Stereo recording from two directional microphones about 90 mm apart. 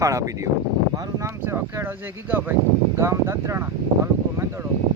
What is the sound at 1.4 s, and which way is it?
Speech, 25° right (ahead or behind).